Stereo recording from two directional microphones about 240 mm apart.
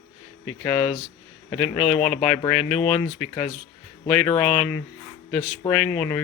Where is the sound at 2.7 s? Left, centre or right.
Left.